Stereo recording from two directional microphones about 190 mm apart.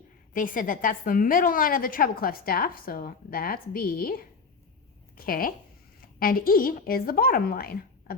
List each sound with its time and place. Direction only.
0.3 s a woman's voice: 45° left (ahead or behind)